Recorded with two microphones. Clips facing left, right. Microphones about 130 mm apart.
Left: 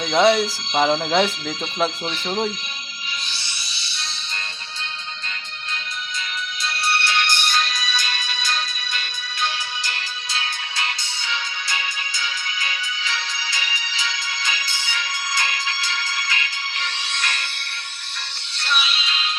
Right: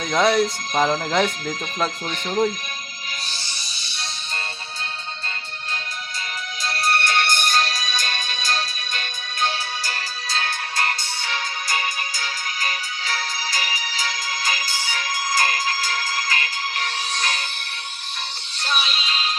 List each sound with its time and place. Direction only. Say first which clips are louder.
0.0 s speech: left 2 dB; centre (ahead or behind)
2.0 s speech: even; 45° right (ahead or behind)
3.3 s music: even; 45° right (ahead or behind)
6.7 s music: right 2 dB; 45° right (ahead or behind)
18.6 s music: even; 40° right (ahead or behind)